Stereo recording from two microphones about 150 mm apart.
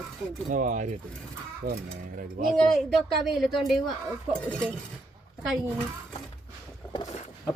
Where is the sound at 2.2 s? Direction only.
60° right (ahead or behind).